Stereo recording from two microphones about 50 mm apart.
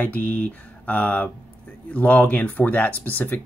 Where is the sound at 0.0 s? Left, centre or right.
Left.